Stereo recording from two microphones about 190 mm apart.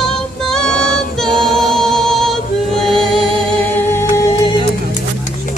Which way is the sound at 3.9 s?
15° left (ahead or behind).